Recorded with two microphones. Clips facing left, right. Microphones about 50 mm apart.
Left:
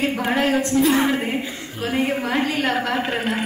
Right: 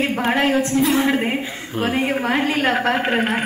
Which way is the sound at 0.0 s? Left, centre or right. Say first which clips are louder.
Right 2 dB; right.